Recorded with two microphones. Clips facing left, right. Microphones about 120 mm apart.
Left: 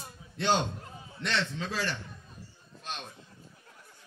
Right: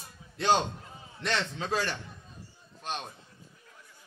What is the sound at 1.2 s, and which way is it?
Speech, 45° right (ahead or behind).